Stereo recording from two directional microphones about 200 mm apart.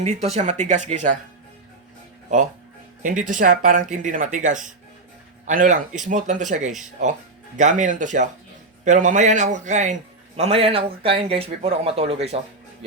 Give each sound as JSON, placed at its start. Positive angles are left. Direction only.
{"t": 0.0, "sound": "a man's voice", "side_deg": -35}
{"t": 2.3, "sound": "a man's voice", "side_deg": -40}